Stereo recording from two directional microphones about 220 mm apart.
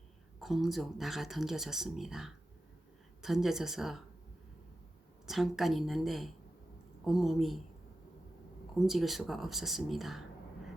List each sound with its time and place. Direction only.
0.3 s speech: centre (ahead or behind)
5.2 s speech: centre (ahead or behind)
8.9 s speech: centre (ahead or behind)